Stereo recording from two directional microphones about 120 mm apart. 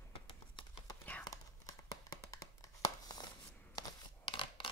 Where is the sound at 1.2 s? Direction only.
30° left (ahead or behind).